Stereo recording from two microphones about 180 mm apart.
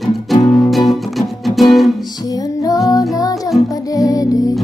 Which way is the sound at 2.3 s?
20° left (ahead or behind).